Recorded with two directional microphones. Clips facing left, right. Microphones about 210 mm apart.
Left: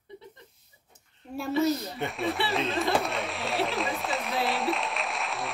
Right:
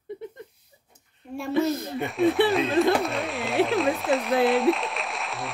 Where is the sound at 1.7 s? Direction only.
55° right (ahead or behind).